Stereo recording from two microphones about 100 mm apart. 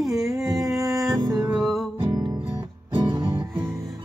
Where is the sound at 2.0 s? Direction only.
40° right (ahead or behind).